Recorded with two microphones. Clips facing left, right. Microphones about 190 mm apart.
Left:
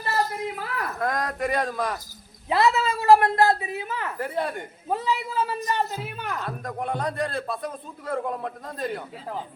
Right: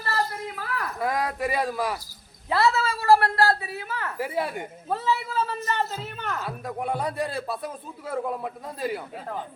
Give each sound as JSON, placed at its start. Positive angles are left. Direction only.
{"t": 0.0, "sound": "a sound", "side_deg": 20}
{"t": 0.9, "sound": "speech", "side_deg": -5}
{"t": 2.5, "sound": "a woman's voice", "side_deg": 20}
{"t": 4.2, "sound": "speech", "side_deg": -5}
{"t": 4.9, "sound": "a man's voice", "side_deg": 15}
{"t": 6.4, "sound": "speech", "side_deg": -5}